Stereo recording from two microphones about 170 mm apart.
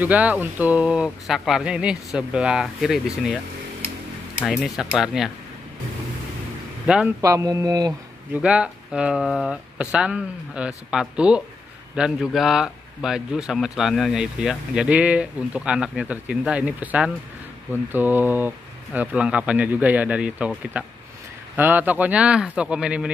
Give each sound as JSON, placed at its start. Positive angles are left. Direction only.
{"t": 0.0, "sound": "speech", "side_deg": -10}
{"t": 4.4, "sound": "speech", "side_deg": 0}
{"t": 7.2, "sound": "speech", "side_deg": -20}
{"t": 8.4, "sound": "speech", "side_deg": -5}